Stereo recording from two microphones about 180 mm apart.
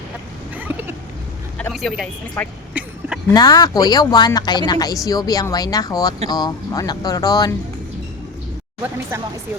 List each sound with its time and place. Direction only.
0.5 s a sound: 10° right (ahead or behind)
1.7 s speech: centre (ahead or behind)
3.3 s speech: 20° left (ahead or behind)
8.8 s speech: 15° right (ahead or behind)